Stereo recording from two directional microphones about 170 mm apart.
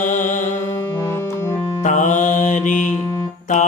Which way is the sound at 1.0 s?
15° left (ahead or behind).